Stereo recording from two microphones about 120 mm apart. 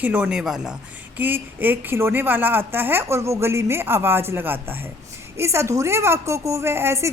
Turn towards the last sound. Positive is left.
turn(degrees=-20)  # may be behind; listen again after turning